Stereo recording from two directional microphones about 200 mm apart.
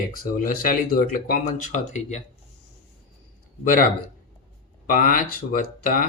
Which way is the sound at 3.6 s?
45° left (ahead or behind).